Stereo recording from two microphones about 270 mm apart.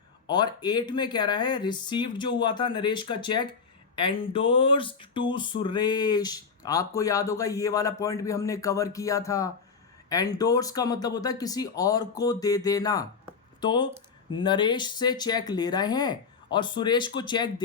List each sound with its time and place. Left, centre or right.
0.3 s speech: centre